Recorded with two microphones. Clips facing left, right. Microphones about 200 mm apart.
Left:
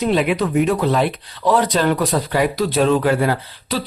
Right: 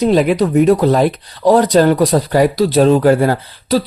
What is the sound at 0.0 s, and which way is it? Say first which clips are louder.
Speech: right 5 dB; 40° right (ahead or behind).